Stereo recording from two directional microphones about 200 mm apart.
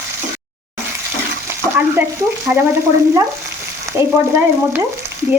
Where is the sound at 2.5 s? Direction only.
10° right (ahead or behind).